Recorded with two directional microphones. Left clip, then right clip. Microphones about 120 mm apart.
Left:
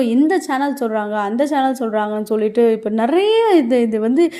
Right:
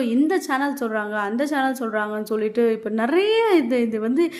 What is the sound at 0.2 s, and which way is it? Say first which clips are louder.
A woman's voice: left 2 dB; 30° left (ahead or behind).